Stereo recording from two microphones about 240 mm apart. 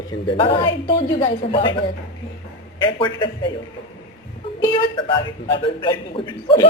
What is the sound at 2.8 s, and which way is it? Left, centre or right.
Speech, centre.